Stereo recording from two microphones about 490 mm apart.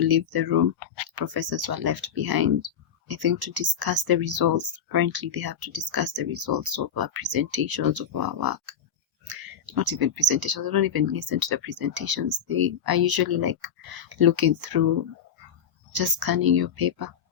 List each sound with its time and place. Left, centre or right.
0.0 s speech: right
15.9 s speech: right